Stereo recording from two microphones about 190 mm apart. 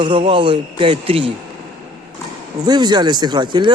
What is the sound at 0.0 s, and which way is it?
Speech, 25° right (ahead or behind).